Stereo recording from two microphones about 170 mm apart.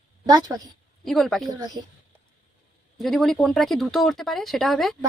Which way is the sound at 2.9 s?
Centre (ahead or behind).